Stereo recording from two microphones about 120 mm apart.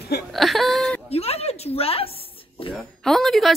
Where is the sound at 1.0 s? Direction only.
60° left (ahead or behind).